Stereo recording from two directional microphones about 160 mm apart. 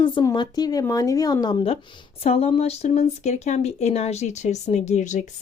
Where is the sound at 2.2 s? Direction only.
40° left (ahead or behind).